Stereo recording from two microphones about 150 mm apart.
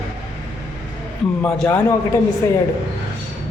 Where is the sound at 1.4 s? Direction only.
10° left (ahead or behind).